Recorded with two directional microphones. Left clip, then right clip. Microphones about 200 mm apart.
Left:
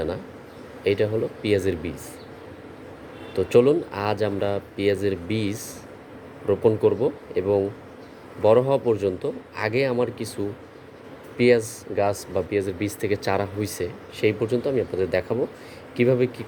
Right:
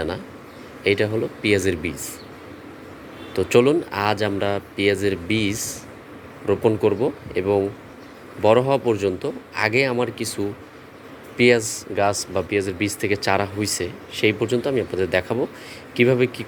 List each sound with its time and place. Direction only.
0.9 s speech: centre (ahead or behind)
3.3 s speech: centre (ahead or behind)